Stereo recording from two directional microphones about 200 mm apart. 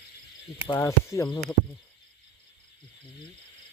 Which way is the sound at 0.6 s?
15° left (ahead or behind).